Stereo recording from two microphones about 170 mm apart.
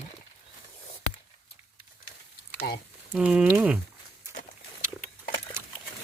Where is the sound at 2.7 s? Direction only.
65° left (ahead or behind).